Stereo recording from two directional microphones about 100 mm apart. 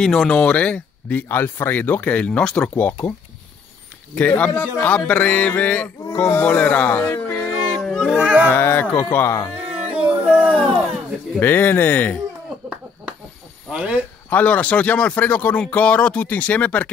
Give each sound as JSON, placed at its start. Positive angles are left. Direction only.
{"t": 0.0, "sound": "speech", "side_deg": 5}
{"t": 4.1, "sound": "speech", "side_deg": 15}
{"t": 6.1, "sound": "speech", "side_deg": 25}
{"t": 7.8, "sound": "a sound", "side_deg": 0}
{"t": 8.5, "sound": "speech", "side_deg": 20}
{"t": 9.9, "sound": "a sound", "side_deg": -20}
{"t": 11.3, "sound": "speech", "side_deg": 20}
{"t": 13.7, "sound": "speech", "side_deg": -10}
{"t": 14.3, "sound": "speech", "side_deg": 15}